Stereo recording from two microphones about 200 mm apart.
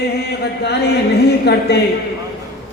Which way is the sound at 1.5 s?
55° left (ahead or behind).